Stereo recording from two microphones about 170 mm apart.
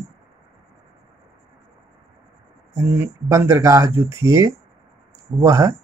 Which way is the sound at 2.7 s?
15° right (ahead or behind).